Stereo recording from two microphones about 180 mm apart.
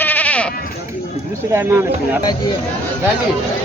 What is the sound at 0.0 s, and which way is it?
Sheep, 10° left (ahead or behind).